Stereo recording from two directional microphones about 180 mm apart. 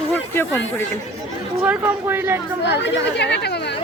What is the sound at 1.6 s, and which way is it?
Speech, 10° right (ahead or behind).